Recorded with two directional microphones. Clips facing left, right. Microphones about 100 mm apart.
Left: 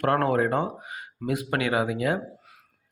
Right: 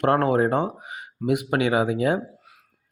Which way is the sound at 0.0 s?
25° right (ahead or behind).